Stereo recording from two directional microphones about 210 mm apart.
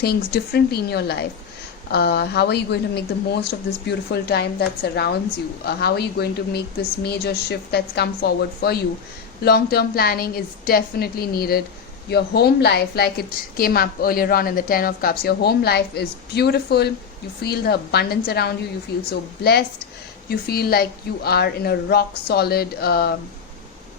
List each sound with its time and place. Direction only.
0.0 s a woman's voice: 50° left (ahead or behind)